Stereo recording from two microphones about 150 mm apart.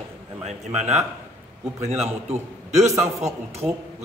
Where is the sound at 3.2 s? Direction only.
45° right (ahead or behind).